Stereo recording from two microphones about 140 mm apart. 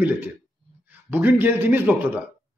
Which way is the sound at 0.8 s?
15° right (ahead or behind).